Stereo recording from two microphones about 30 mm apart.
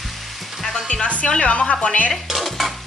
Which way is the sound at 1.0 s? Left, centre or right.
Left.